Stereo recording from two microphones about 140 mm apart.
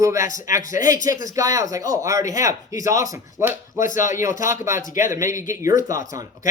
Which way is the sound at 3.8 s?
70° left (ahead or behind).